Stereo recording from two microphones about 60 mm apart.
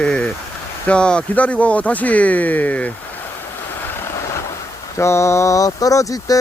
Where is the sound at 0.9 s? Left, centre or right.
Centre.